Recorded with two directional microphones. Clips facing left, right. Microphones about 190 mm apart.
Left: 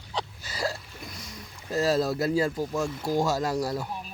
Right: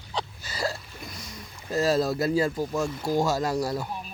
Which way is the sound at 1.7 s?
Centre (ahead or behind).